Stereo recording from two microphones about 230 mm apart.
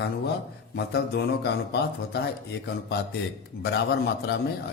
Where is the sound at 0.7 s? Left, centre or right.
Left.